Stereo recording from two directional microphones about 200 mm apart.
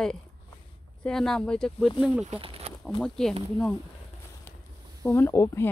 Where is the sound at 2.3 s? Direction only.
25° right (ahead or behind).